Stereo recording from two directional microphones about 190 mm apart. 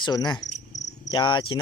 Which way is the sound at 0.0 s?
20° left (ahead or behind).